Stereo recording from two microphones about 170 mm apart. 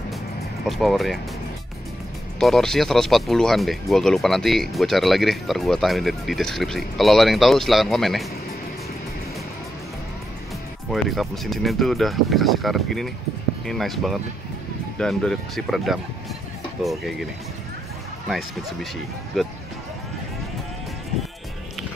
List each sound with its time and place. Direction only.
0.7 s speech: centre (ahead or behind)
2.4 s speech: centre (ahead or behind)
10.9 s speech: centre (ahead or behind)
19.4 s speech: centre (ahead or behind)